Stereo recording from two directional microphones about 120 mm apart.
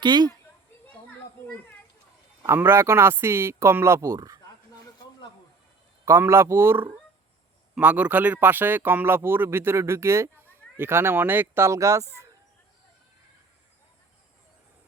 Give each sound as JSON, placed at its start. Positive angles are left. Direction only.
{"t": 0.0, "sound": "speech", "side_deg": -35}
{"t": 2.6, "sound": "speech", "side_deg": -20}
{"t": 6.1, "sound": "a man's voice", "side_deg": -25}